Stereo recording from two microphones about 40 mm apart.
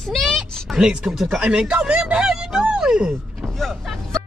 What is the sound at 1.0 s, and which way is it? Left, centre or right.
Speech, centre.